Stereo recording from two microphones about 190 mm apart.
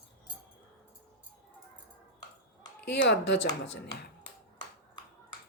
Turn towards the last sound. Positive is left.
turn(degrees=65)  # may be behind; listen again after turning